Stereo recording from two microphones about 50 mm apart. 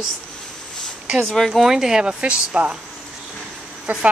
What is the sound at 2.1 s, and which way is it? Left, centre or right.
Speech, right.